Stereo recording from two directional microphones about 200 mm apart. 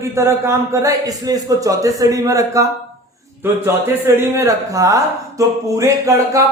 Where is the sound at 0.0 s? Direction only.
15° right (ahead or behind).